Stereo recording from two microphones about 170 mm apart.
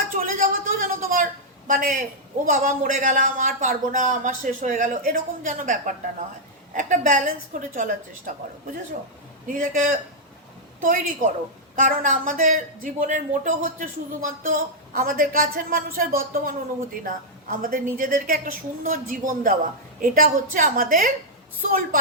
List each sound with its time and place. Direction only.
0.1 s a sound: 55° right (ahead or behind)
2.5 s speech: 50° right (ahead or behind)
9.5 s speech: 50° right (ahead or behind)